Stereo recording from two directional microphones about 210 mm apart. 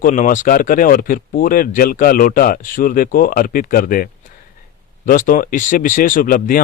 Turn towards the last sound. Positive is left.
turn(degrees=40)  # may be behind; listen again after turning